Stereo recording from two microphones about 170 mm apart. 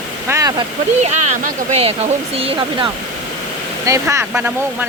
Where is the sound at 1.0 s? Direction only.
40° right (ahead or behind).